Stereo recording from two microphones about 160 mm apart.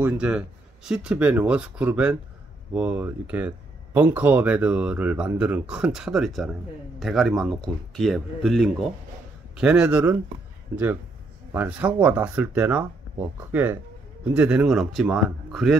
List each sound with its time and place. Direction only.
0.0 s speech: 5° right (ahead or behind)
10.7 s speech: 15° right (ahead or behind); by 15.8 s centre (ahead or behind)